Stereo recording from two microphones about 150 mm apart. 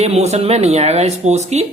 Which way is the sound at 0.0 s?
45° right (ahead or behind).